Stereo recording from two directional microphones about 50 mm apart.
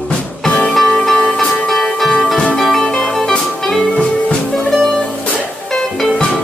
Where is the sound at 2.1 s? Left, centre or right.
Centre.